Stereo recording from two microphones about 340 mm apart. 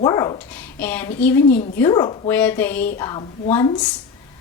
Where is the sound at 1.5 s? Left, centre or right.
Left.